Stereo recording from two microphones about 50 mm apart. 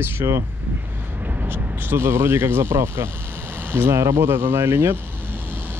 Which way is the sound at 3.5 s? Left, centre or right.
Right.